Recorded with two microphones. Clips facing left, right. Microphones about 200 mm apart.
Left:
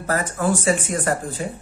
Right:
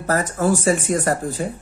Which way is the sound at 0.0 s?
40° right (ahead or behind).